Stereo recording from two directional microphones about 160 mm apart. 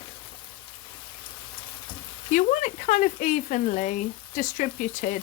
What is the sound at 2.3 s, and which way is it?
Speech, 55° left (ahead or behind).